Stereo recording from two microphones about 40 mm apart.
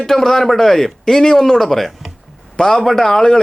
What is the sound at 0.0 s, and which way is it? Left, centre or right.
A man's voice, centre.